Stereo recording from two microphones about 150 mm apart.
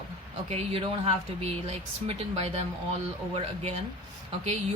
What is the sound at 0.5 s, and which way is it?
Speech, 45° right (ahead or behind).